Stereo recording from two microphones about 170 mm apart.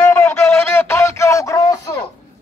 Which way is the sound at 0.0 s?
10° left (ahead or behind).